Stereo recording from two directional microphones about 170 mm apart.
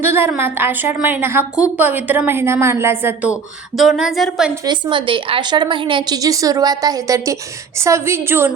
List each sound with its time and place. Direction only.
0.0 s a woman's voice: 15° right (ahead or behind)
3.8 s a woman's voice: centre (ahead or behind)
4.6 s a woman's voice: 30° right (ahead or behind)